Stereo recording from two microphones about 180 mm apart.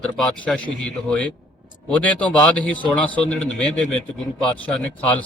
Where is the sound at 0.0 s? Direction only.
5° left (ahead or behind).